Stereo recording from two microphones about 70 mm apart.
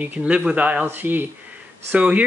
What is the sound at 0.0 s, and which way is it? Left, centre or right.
Speech, centre.